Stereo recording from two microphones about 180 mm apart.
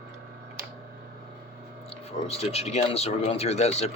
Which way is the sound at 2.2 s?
35° left (ahead or behind).